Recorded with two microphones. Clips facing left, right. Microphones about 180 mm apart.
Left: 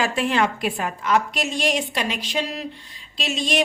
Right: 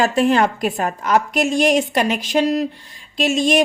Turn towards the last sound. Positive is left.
turn(degrees=-50)  # may be behind; listen again after turning